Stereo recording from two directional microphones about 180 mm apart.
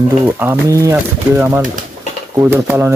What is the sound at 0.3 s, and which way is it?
Speech, 15° right (ahead or behind).